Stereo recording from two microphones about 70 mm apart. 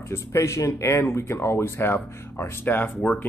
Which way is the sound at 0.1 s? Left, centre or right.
Left.